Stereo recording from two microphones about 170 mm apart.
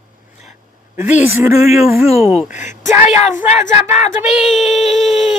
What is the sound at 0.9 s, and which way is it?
Speech, 10° right (ahead or behind).